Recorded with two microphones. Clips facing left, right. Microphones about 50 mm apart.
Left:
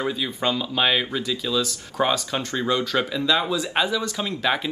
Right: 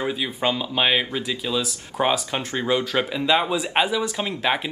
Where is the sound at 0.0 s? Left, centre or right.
Centre.